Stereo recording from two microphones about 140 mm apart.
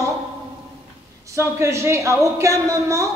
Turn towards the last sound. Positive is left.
turn(degrees=-20)  # may be behind; listen again after turning